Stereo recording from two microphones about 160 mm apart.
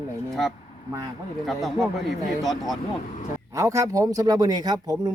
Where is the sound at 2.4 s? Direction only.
Centre (ahead or behind).